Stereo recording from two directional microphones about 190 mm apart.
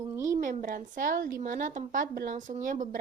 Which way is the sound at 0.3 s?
40° right (ahead or behind).